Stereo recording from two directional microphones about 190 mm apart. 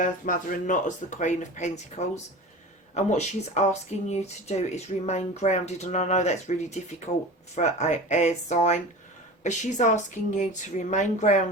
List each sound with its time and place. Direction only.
0.0 s speech: 45° left (ahead or behind)